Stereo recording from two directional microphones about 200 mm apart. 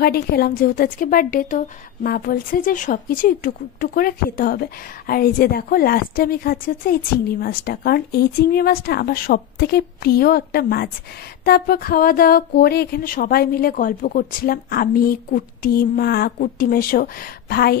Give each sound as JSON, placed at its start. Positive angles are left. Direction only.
{"t": 0.0, "sound": "speech", "side_deg": 50}